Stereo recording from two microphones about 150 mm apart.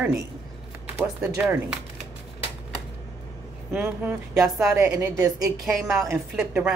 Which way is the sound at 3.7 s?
15° right (ahead or behind).